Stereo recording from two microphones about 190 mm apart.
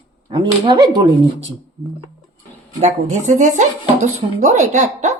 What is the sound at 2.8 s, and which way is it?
Speech, 40° right (ahead or behind).